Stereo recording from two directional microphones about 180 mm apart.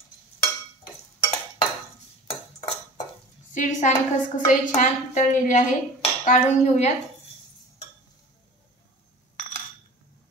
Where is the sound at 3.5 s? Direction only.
45° left (ahead or behind).